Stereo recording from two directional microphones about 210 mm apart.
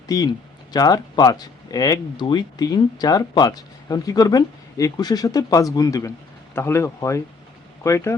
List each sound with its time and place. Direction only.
0.1 s speech: 20° left (ahead or behind)